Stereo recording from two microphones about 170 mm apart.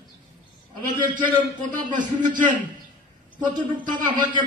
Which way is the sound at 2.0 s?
50° right (ahead or behind).